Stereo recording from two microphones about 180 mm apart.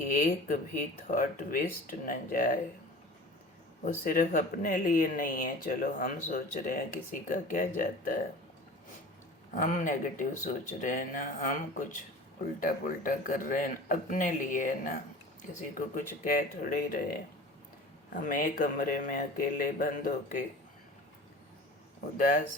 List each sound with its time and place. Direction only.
0.1 s speech: 45° left (ahead or behind)
4.0 s speech: 50° left (ahead or behind)
9.5 s speech: 45° left (ahead or behind)
22.2 s speech: 50° left (ahead or behind)